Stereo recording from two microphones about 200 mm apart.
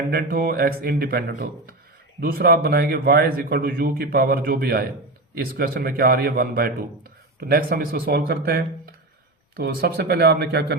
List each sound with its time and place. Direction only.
0.1 s a man's voice: 50° right (ahead or behind)